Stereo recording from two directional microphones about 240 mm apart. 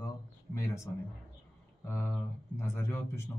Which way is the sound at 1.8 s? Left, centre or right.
Centre.